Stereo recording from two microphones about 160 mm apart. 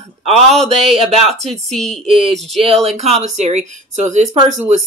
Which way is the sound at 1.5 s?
Centre (ahead or behind).